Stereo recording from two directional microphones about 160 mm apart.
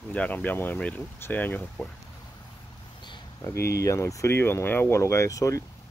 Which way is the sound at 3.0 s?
20° left (ahead or behind).